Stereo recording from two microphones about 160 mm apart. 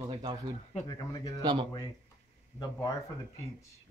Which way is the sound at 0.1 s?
35° right (ahead or behind).